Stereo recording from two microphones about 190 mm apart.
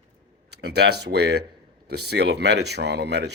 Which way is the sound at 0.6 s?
60° right (ahead or behind).